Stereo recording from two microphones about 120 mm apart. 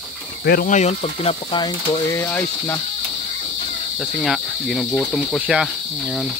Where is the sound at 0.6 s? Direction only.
70° left (ahead or behind).